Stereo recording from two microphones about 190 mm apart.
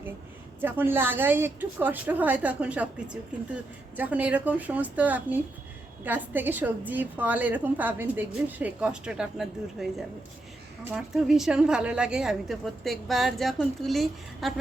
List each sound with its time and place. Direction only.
0.6 s a woman's voice: 10° right (ahead or behind)
10.9 s a woman's voice: centre (ahead or behind)